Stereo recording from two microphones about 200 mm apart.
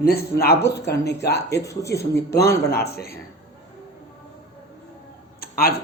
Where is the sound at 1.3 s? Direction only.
15° left (ahead or behind).